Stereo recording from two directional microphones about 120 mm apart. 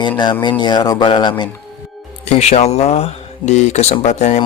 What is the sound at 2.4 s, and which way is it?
Speech, 65° left (ahead or behind).